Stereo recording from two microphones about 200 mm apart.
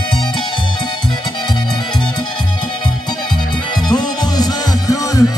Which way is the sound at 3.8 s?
20° left (ahead or behind).